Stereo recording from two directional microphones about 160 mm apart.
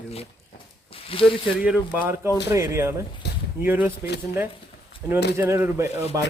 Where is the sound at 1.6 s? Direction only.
10° right (ahead or behind).